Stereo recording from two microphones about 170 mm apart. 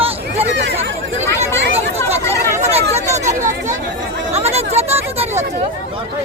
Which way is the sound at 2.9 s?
40° right (ahead or behind).